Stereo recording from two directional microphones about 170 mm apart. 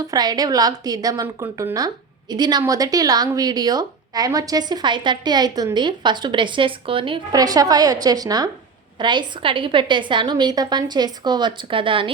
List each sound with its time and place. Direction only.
0.1 s speech: 25° right (ahead or behind)